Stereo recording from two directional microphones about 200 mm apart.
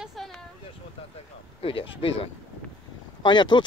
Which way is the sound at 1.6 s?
25° left (ahead or behind).